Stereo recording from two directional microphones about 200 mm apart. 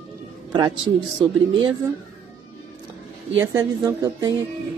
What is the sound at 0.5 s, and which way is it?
Speech, 25° right (ahead or behind).